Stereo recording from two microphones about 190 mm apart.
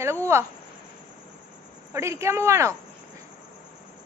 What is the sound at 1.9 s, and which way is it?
Speech, 15° right (ahead or behind).